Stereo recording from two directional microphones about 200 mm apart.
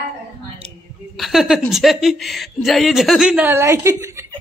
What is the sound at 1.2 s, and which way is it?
A woman's voice, centre (ahead or behind).